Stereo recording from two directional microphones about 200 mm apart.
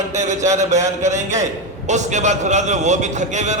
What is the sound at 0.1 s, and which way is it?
A man's voice, 35° right (ahead or behind).